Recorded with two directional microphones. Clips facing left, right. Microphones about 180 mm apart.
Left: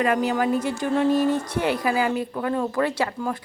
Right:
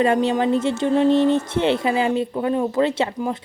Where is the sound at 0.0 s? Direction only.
30° right (ahead or behind).